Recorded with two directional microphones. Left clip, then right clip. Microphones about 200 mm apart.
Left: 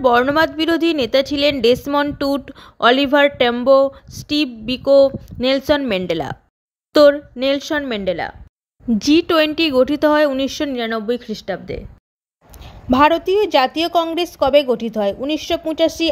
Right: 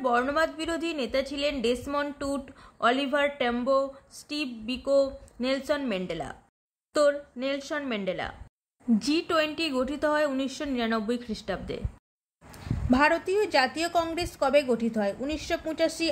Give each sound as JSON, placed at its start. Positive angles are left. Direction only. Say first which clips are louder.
{"t": 0.0, "sound": "speech", "louder": "left 11 dB", "side_deg": 40}
{"t": 12.9, "sound": "speech", "louder": "left 10 dB", "side_deg": 35}